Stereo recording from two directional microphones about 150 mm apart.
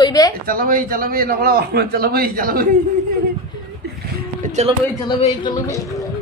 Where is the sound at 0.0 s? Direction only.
25° left (ahead or behind).